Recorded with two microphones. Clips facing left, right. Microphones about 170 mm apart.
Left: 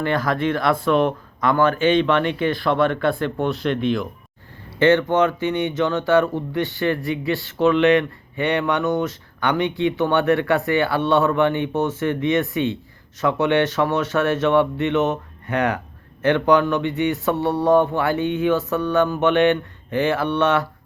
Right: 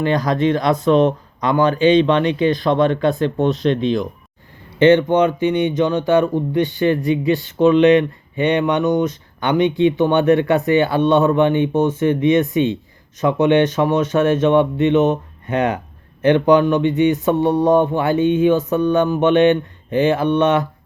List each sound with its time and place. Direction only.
0.0 s speech: 20° right (ahead or behind)